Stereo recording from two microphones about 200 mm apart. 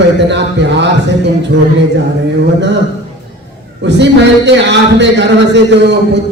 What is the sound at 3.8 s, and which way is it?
A woman's voice, 60° right (ahead or behind).